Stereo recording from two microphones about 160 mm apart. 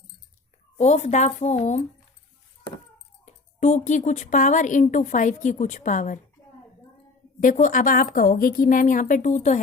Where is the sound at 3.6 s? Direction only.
50° left (ahead or behind).